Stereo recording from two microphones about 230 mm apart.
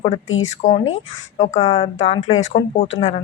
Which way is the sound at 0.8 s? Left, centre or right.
Left.